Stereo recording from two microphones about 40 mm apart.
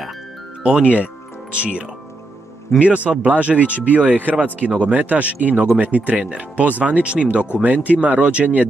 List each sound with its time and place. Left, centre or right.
0.7 s speech: right